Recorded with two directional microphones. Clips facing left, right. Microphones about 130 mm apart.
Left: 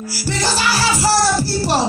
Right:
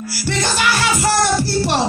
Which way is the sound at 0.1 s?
40° left (ahead or behind).